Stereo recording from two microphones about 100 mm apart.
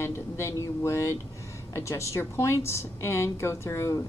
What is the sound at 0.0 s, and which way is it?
A woman's voice, 30° left (ahead or behind).